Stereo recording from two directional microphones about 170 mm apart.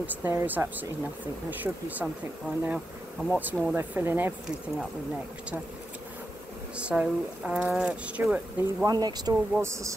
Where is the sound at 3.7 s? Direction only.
10° right (ahead or behind).